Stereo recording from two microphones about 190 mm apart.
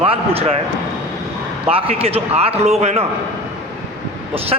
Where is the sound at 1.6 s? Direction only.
30° right (ahead or behind).